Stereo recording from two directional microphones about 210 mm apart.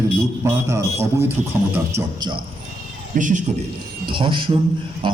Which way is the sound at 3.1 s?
40° right (ahead or behind).